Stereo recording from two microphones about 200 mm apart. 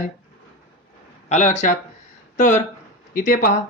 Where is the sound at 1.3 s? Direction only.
35° left (ahead or behind).